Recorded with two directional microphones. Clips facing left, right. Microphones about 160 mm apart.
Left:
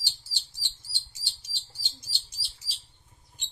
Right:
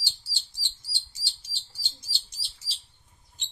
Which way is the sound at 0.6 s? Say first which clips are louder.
Right 1 dB; 10° right (ahead or behind).